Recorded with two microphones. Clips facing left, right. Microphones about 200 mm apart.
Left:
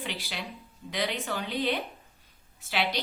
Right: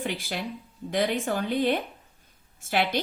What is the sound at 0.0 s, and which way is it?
A woman's voice, 50° right (ahead or behind).